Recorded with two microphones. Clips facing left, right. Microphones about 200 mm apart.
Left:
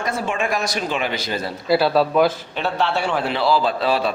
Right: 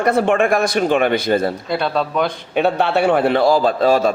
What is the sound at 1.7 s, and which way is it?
Speech, 5° left (ahead or behind).